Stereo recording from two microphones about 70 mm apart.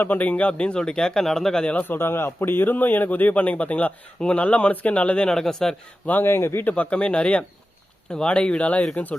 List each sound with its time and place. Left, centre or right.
0.0 s speech: left; by 1.6 s centre
1.8 s speech: left; by 5.7 s centre
6.1 s speech: left